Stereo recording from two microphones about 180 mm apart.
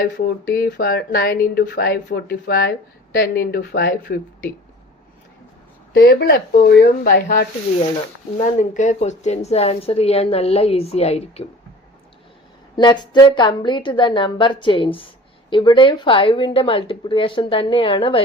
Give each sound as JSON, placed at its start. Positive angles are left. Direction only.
{"t": 0.0, "sound": "speech", "side_deg": 55}
{"t": 5.9, "sound": "speech", "side_deg": 60}
{"t": 8.4, "sound": "a woman's voice", "side_deg": 40}
{"t": 12.7, "sound": "speech", "side_deg": 25}